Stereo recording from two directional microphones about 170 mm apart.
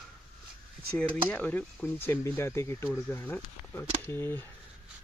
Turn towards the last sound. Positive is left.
turn(degrees=15)  # may be behind; listen again after turning